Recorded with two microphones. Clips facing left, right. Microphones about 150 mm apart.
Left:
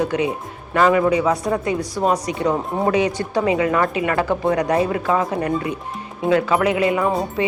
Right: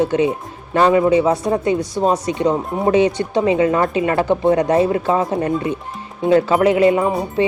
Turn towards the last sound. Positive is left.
turn(degrees=-30)  # may be behind; listen again after turning